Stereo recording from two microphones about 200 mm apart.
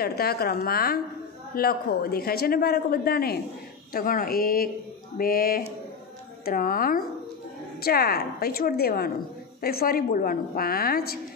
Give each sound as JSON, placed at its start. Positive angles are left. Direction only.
{"t": 0.0, "sound": "a man's voice", "side_deg": 50}